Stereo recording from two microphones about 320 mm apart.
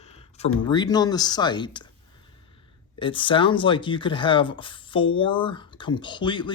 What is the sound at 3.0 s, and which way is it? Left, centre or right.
Speech, centre.